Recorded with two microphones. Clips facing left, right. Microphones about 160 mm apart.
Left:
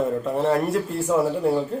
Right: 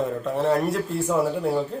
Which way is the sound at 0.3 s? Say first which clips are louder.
Right 2 dB; centre (ahead or behind).